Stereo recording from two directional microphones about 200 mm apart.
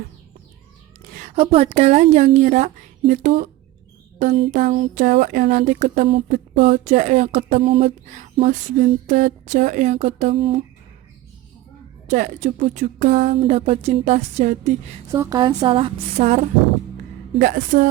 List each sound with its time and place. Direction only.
1.4 s speech: 30° right (ahead or behind)
5.1 s speech: 50° right (ahead or behind); by 10.6 s 30° right (ahead or behind)
12.0 s speech: 40° right (ahead or behind)
13.3 s speech: 30° right (ahead or behind)
15.1 s a woman's voice: 15° right (ahead or behind); by 17.8 s 40° right (ahead or behind)